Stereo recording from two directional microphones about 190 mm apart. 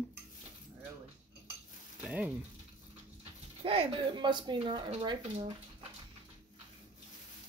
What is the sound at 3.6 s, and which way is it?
Speech, 25° right (ahead or behind).